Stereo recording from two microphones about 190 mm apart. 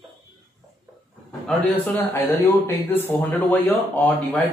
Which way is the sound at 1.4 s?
10° left (ahead or behind).